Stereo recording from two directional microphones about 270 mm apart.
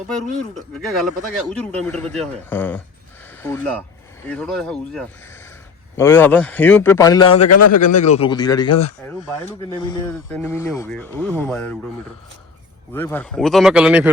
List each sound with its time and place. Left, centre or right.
0.7 s speech: centre
7.4 s speech: left
7.9 s speech: left
9.0 s speech: centre
12.9 s speech: centre